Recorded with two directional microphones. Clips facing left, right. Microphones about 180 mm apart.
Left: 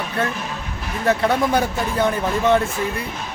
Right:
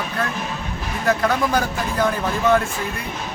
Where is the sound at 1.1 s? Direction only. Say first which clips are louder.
Left 1 dB; 25° left (ahead or behind).